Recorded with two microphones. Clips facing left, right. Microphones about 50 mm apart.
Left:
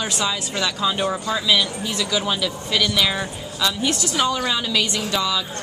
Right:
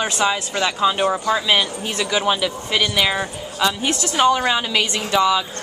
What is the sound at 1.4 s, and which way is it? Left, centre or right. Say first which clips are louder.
A woman's voice: right 1 dB; right.